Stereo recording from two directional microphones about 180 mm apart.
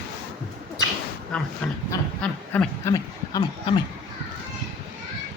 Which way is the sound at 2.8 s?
20° left (ahead or behind).